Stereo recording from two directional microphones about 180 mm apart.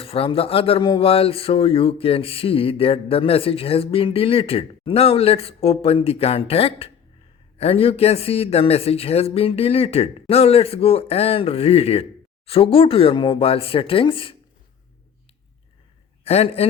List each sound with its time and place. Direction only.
0.0 s speech: 30° left (ahead or behind)
16.2 s a man's voice: 35° left (ahead or behind)